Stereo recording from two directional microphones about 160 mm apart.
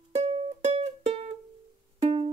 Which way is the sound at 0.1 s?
45° right (ahead or behind).